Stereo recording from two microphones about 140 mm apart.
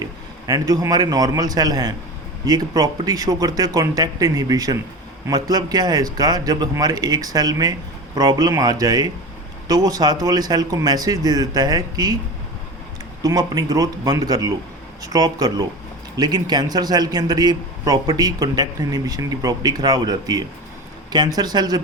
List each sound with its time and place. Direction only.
0.0 s a man's voice: 25° right (ahead or behind)
13.2 s speech: 25° right (ahead or behind)